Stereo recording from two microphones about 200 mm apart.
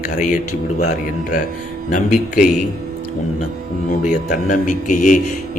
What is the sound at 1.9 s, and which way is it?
Speech, 35° left (ahead or behind).